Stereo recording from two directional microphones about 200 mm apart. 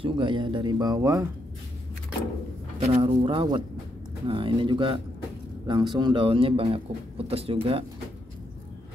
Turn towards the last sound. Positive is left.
turn(degrees=-25)  # may be behind; listen again after turning